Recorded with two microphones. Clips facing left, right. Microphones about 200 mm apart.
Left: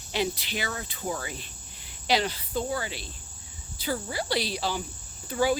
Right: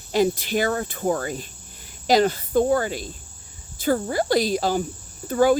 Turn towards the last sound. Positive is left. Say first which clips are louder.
# right 7 dB
turn(degrees=-50)  # may be behind; listen again after turning